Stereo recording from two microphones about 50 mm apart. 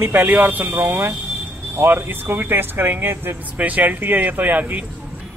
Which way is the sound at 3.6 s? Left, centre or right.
Right.